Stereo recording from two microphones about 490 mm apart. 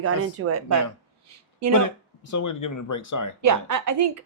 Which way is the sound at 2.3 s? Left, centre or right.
Left.